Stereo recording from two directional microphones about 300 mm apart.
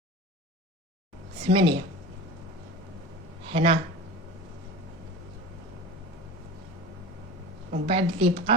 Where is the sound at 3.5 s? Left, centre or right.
Centre.